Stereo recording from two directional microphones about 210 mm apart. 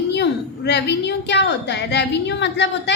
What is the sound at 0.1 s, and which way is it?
A woman's voice, 55° left (ahead or behind).